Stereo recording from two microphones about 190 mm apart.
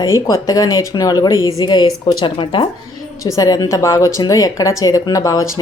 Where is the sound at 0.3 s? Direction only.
15° left (ahead or behind).